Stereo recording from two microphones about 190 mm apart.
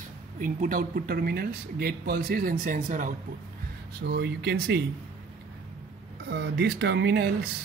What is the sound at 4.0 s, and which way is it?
Speech, 60° right (ahead or behind).